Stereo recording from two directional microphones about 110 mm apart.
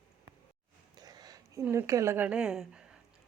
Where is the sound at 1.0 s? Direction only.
35° right (ahead or behind).